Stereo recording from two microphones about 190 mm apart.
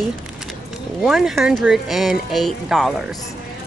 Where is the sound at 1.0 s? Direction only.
Centre (ahead or behind).